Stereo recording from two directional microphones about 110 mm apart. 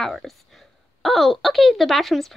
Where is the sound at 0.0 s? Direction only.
Centre (ahead or behind).